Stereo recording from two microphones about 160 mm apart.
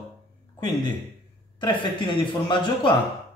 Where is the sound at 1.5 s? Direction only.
30° left (ahead or behind).